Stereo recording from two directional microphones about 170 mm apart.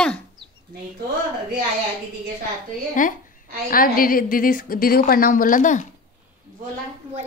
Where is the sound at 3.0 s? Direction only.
50° left (ahead or behind).